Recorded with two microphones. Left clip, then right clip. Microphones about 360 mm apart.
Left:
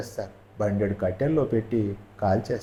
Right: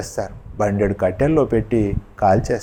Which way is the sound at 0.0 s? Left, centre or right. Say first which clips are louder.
Right 8 dB; right.